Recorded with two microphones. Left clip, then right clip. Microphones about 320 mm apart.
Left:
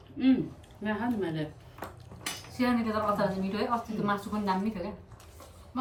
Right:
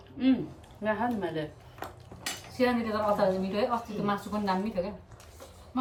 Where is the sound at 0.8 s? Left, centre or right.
Centre.